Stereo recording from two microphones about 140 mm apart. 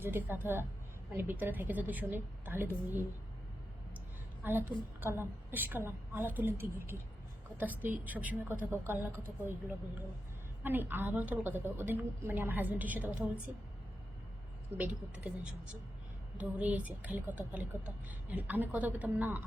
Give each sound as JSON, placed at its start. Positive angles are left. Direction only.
{"t": 0.0, "sound": "speech", "side_deg": -15}
{"t": 4.4, "sound": "speech", "side_deg": -15}
{"t": 14.8, "sound": "speech", "side_deg": -10}